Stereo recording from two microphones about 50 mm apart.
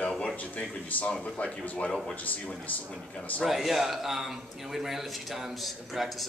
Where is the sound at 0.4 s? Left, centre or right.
Left.